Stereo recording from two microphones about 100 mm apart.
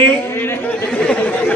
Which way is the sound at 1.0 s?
15° left (ahead or behind).